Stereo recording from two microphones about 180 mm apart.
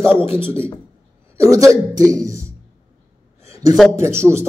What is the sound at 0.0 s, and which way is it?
Speech, 15° right (ahead or behind).